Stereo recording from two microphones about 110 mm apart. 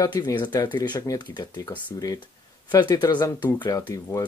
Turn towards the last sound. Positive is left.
turn(degrees=30)  # may be behind; listen again after turning